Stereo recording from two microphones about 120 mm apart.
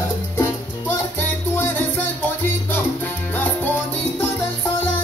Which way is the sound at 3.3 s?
15° left (ahead or behind).